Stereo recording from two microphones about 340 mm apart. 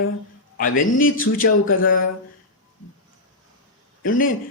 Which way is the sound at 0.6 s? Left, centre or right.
Left.